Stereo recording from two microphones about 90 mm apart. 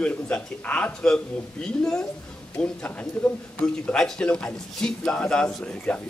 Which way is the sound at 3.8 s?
10° left (ahead or behind).